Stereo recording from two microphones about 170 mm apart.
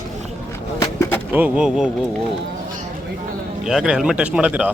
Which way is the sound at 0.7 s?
15° left (ahead or behind).